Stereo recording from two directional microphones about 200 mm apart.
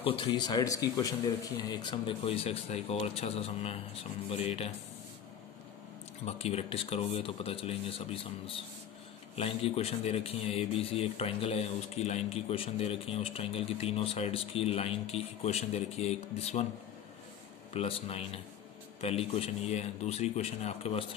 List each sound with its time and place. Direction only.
0.0 s speech: 25° left (ahead or behind)
6.2 s speech: 30° left (ahead or behind)
9.3 s speech: 30° left (ahead or behind)
17.7 s speech: 30° left (ahead or behind)